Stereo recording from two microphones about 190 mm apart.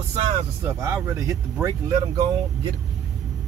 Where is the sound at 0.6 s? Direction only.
15° right (ahead or behind).